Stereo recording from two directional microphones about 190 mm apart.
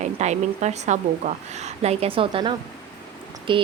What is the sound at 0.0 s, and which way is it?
Speech, 35° right (ahead or behind).